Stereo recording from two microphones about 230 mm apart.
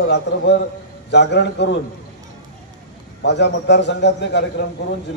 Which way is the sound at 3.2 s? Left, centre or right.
Left.